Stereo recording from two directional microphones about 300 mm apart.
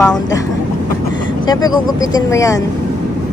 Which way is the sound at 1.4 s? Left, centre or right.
Centre.